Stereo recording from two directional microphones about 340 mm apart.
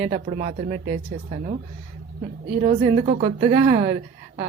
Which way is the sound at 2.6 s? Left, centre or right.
Centre.